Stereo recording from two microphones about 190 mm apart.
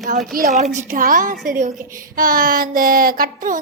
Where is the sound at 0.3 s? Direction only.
40° right (ahead or behind).